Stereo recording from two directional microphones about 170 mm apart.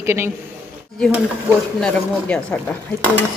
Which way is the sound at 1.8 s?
5° left (ahead or behind).